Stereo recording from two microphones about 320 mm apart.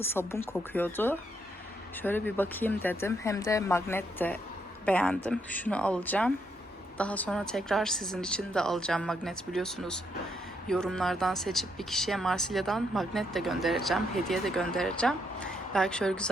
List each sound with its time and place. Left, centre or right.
0.0 s speech: centre